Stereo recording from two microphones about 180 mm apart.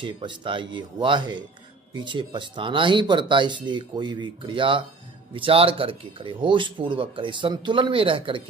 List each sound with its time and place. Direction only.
0.0 s speech: 25° right (ahead or behind)